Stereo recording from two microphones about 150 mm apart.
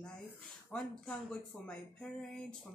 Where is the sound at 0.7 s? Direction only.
5° left (ahead or behind).